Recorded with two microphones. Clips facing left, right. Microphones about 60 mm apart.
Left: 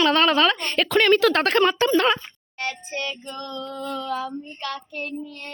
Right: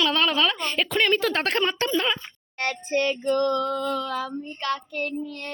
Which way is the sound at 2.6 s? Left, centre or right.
Right.